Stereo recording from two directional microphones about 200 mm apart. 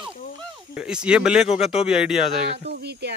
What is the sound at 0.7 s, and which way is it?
Speech, 5° right (ahead or behind).